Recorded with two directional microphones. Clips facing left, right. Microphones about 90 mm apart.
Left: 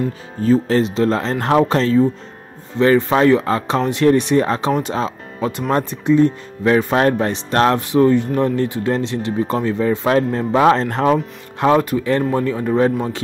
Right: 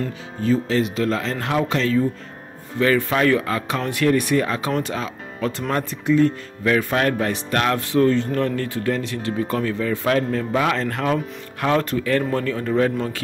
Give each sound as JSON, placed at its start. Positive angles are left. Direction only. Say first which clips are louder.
{"t": 0.4, "sound": "speech", "louder": "left 5 dB", "side_deg": 40}
{"t": 7.9, "sound": "speech", "louder": "left 4 dB", "side_deg": 15}